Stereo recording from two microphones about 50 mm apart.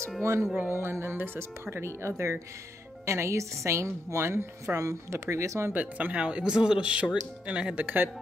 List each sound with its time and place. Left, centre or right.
0.2 s a woman's voice: right
0.8 s a woman's voice: right
5.7 s speech: right
6.1 s speech: right
7.8 s speech: right